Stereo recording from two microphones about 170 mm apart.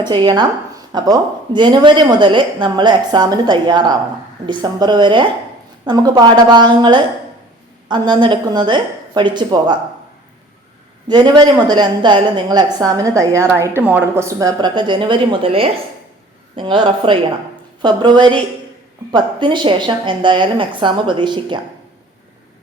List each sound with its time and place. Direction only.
0.0 s a woman's voice: 25° right (ahead or behind)
11.1 s a woman's voice: 25° right (ahead or behind)